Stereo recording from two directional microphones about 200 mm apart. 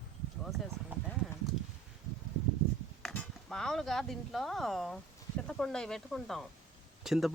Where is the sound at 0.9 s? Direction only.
10° right (ahead or behind).